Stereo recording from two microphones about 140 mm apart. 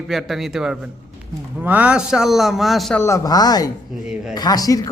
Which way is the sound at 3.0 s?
25° left (ahead or behind).